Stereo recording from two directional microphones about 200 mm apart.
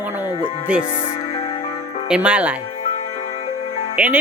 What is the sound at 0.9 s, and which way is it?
Music, 35° left (ahead or behind).